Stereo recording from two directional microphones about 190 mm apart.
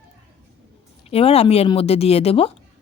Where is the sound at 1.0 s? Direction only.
30° left (ahead or behind).